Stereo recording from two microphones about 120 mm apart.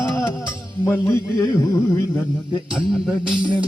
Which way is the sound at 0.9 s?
20° left (ahead or behind).